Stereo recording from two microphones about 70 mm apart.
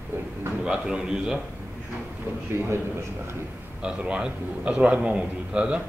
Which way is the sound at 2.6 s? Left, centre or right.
Right.